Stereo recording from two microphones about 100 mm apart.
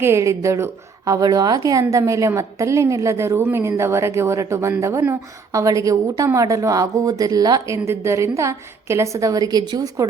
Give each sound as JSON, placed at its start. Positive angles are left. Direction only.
{"t": 0.0, "sound": "a woman's voice", "side_deg": -30}
{"t": 7.7, "sound": "a woman's voice", "side_deg": -30}